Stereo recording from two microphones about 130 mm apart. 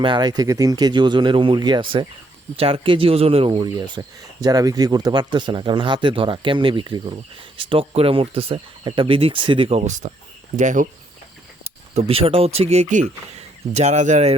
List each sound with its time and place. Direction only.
0.0 s speech: 35° right (ahead or behind); by 10.1 s 65° right (ahead or behind)
10.6 s speech: 75° right (ahead or behind)
11.9 s speech: 50° right (ahead or behind)